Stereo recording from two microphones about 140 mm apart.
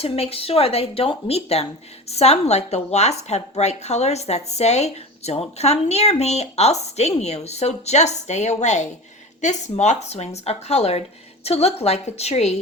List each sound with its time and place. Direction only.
0.0 s speech: 45° left (ahead or behind)